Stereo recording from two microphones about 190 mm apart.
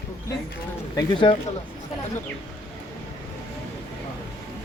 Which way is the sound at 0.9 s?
25° left (ahead or behind).